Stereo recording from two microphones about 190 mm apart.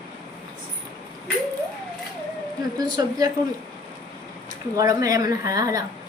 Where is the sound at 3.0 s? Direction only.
20° right (ahead or behind).